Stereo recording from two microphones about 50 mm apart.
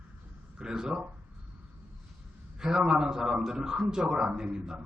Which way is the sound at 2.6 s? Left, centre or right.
Centre.